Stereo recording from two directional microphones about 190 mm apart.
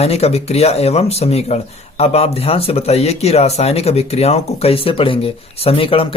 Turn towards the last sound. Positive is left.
turn(degrees=30)  # may be behind; listen again after turning